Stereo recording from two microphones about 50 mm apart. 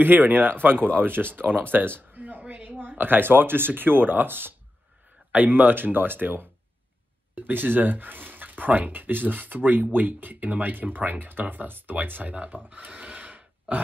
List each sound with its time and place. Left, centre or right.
0.0 s speech: right